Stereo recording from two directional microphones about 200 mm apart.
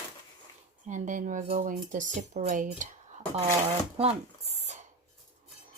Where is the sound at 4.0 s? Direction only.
30° right (ahead or behind).